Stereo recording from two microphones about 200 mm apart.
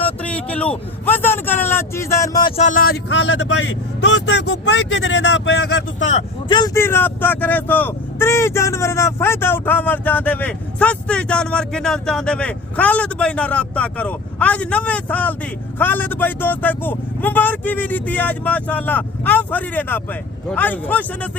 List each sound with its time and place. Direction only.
0.0 s speech: 5° left (ahead or behind)
2.6 s a man's voice: 40° left (ahead or behind); by 6.1 s 65° left (ahead or behind)
6.5 s speech: 15° left (ahead or behind)